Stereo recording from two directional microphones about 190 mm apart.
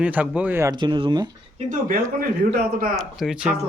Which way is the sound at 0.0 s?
5° right (ahead or behind).